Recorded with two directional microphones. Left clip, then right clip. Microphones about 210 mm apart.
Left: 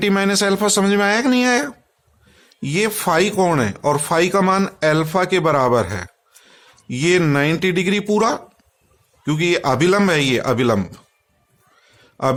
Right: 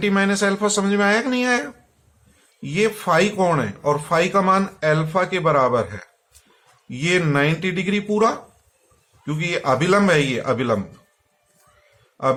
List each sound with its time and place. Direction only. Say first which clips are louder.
0.0 s speech: left 2 dB; 55° left (ahead or behind)